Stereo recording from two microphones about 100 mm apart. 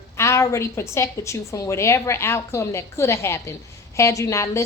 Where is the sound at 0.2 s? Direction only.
30° left (ahead or behind).